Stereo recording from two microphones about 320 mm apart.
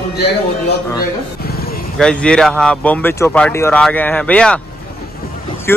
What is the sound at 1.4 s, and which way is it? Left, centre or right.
Vehicle, left.